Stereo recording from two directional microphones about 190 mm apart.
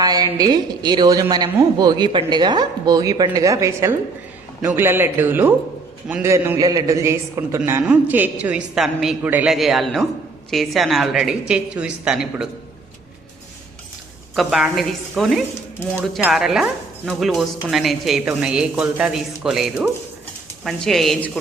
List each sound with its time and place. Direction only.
0.0 s a woman's voice: 20° right (ahead or behind); by 12.5 s 5° right (ahead or behind)
14.3 s speech: centre (ahead or behind)